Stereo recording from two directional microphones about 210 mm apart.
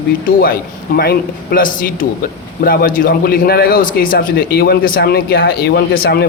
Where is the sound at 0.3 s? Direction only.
45° left (ahead or behind).